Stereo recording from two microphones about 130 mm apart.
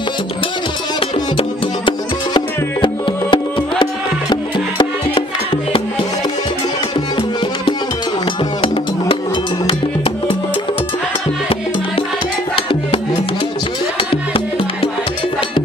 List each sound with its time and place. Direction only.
1.9 s music: 35° left (ahead or behind)
14.1 s music: 45° left (ahead or behind)